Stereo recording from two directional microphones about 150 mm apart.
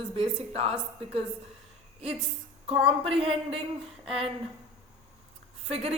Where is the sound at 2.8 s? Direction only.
40° right (ahead or behind).